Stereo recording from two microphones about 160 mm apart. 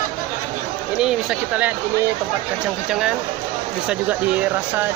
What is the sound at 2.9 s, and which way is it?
Speech, 5° right (ahead or behind).